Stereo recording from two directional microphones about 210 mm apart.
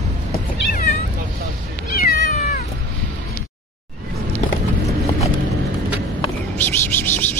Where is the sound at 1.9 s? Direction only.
45° left (ahead or behind).